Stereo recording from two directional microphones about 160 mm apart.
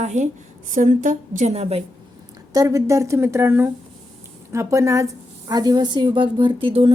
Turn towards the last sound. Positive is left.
turn(degrees=-35)  # may be behind; listen again after turning